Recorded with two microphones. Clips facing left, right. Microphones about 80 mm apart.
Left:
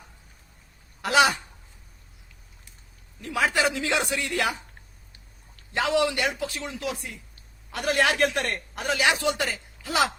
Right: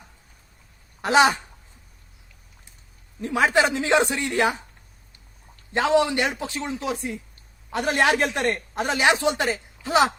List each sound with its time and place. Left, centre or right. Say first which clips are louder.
1.0 s speech: right 3 dB; right
3.2 s speech: right 5 dB; right
5.7 s speech: right 4 dB; right